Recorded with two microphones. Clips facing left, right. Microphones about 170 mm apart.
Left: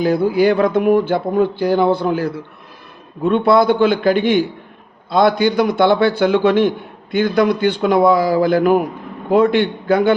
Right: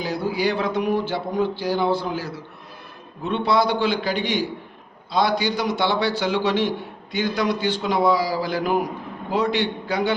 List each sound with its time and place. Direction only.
0.0 s a man's voice: 55° left (ahead or behind)